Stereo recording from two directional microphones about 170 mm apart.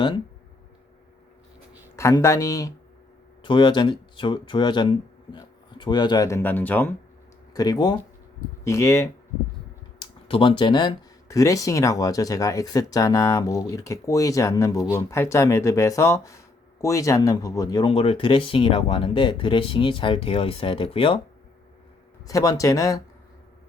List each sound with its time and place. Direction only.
2.0 s speech: 15° left (ahead or behind)
7.5 s speech: 25° left (ahead or behind)
10.0 s speech: 30° left (ahead or behind)
17.9 s speech: 35° left (ahead or behind)
22.3 s speech: 20° left (ahead or behind)